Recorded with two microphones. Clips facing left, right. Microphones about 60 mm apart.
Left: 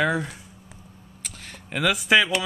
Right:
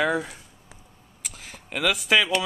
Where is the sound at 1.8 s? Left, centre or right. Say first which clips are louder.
Left 2 dB; centre.